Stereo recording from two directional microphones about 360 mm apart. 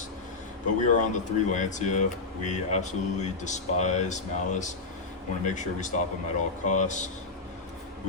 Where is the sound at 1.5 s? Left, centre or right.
Centre.